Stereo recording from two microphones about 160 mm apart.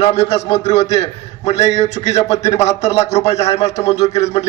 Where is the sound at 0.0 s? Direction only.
40° left (ahead or behind).